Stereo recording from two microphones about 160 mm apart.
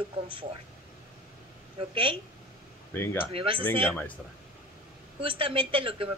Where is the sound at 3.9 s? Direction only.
10° left (ahead or behind).